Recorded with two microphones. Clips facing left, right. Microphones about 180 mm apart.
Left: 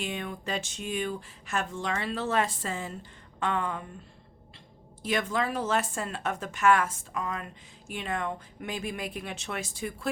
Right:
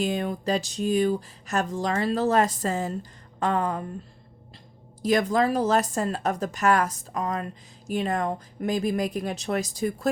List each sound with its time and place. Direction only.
0.0 s speech: 35° right (ahead or behind)
5.0 s speech: 40° right (ahead or behind)